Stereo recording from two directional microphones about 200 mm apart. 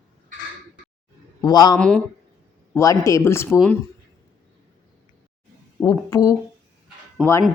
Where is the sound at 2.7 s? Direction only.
15° left (ahead or behind).